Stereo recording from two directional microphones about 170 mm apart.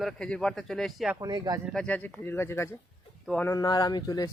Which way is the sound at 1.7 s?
10° left (ahead or behind).